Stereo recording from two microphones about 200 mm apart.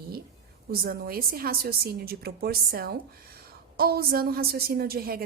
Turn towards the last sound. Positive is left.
turn(degrees=-50)  # may be behind; listen again after turning